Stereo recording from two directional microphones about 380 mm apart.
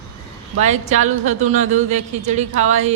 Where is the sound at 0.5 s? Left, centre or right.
Centre.